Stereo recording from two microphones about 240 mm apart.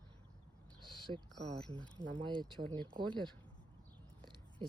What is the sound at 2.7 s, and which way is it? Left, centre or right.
Speech, centre.